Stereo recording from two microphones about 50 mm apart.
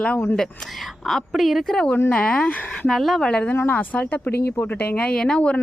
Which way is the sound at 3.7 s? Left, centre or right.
Left.